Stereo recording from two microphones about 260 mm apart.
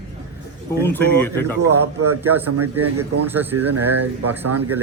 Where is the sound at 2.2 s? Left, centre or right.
Centre.